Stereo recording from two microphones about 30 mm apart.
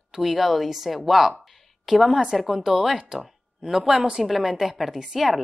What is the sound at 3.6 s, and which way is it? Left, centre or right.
Speech, right.